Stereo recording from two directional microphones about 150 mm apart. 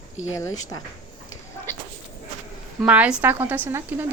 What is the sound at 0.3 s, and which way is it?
Speech, 20° left (ahead or behind).